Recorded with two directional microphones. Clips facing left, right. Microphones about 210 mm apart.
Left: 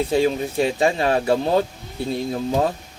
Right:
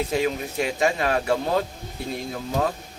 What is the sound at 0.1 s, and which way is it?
Speech, 30° left (ahead or behind).